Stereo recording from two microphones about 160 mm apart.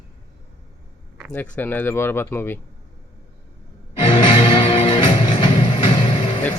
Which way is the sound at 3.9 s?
30° left (ahead or behind).